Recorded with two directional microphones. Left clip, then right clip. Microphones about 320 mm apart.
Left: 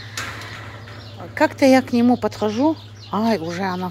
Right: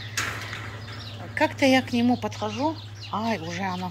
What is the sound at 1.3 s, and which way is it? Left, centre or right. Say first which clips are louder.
Speech: left 6 dB; centre.